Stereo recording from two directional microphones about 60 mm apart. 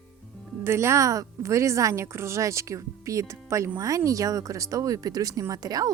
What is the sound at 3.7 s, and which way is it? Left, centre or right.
Speech, right.